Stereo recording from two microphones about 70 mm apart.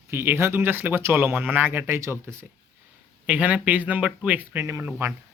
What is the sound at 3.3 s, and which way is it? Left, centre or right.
Speech, right.